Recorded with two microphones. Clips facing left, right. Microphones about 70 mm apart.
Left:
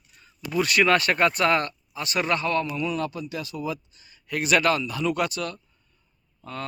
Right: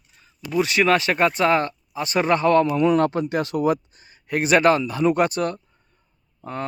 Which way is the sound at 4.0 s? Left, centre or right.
Right.